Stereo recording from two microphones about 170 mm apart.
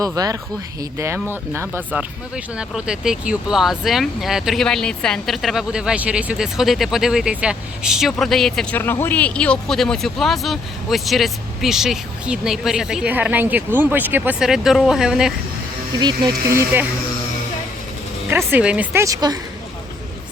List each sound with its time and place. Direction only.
0.0 s speech: 20° right (ahead or behind); by 15.3 s 5° right (ahead or behind)
16.0 s speech: 25° right (ahead or behind)
18.3 s speech: 10° right (ahead or behind)
19.0 s speech: 20° right (ahead or behind)